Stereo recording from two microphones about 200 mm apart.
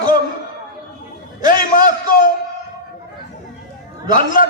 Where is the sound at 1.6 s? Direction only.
45° left (ahead or behind).